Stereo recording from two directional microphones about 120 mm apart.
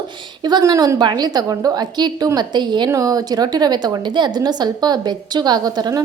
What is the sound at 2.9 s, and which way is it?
A woman's voice, 30° right (ahead or behind).